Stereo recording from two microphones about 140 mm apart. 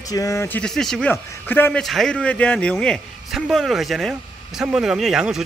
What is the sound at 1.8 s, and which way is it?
A man's voice, 5° left (ahead or behind).